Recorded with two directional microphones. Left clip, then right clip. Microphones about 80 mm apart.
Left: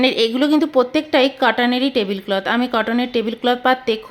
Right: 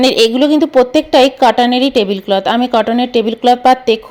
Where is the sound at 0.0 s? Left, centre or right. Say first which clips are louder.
Right 6 dB; right.